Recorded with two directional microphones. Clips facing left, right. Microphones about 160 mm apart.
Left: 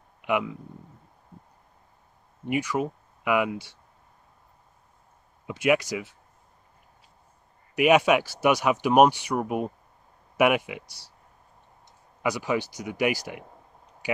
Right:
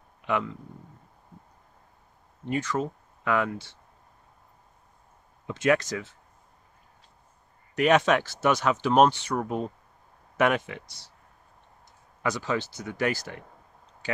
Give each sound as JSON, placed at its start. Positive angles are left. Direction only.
{"t": 0.2, "sound": "speech", "side_deg": 15}
{"t": 2.4, "sound": "speech", "side_deg": 10}
{"t": 5.5, "sound": "speech", "side_deg": 10}
{"t": 7.7, "sound": "speech", "side_deg": 10}
{"t": 12.2, "sound": "speech", "side_deg": 10}
{"t": 14.0, "sound": "a sound", "side_deg": 10}